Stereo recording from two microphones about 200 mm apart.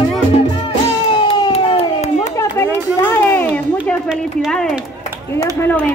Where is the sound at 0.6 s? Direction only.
25° left (ahead or behind).